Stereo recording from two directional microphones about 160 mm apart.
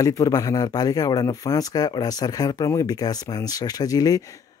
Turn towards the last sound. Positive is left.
turn(degrees=25)  # may be behind; listen again after turning